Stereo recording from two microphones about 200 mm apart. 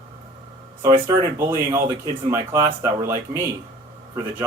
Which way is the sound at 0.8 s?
15° right (ahead or behind).